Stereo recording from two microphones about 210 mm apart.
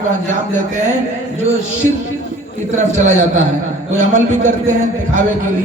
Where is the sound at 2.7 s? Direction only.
35° right (ahead or behind).